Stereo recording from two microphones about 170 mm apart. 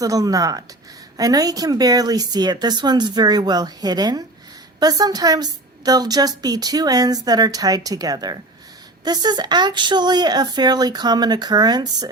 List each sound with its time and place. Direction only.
0.0 s a woman's voice: 20° right (ahead or behind)